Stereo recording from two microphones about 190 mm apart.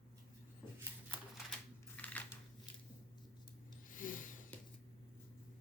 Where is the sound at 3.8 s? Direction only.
45° left (ahead or behind).